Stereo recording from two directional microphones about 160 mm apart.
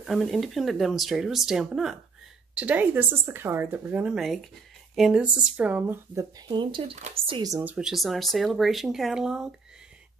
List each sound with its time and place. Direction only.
0.0 s speech: centre (ahead or behind)
6.1 s speech: 25° right (ahead or behind)
7.0 s speech: 45° right (ahead or behind)
7.2 s speech: 30° right (ahead or behind)
7.5 s speech: 10° right (ahead or behind)